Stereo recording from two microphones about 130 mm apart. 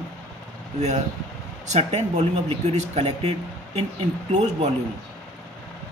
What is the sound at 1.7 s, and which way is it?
Speech, 55° right (ahead or behind).